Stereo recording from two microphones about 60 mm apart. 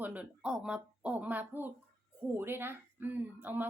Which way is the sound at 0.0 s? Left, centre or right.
Right.